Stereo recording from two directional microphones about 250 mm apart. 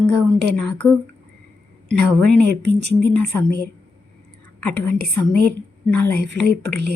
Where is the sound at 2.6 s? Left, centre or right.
Right.